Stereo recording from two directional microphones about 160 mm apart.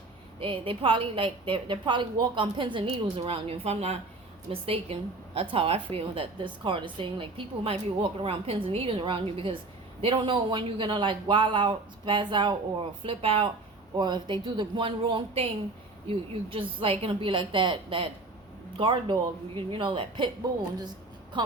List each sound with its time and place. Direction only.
0.3 s a woman's voice: 35° right (ahead or behind)